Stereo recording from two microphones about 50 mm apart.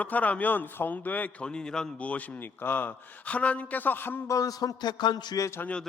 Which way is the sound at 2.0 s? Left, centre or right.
Left.